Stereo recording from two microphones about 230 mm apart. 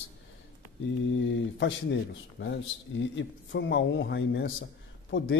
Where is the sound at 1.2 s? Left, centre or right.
Left.